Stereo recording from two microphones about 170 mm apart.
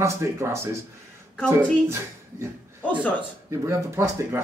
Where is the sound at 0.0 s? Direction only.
15° right (ahead or behind).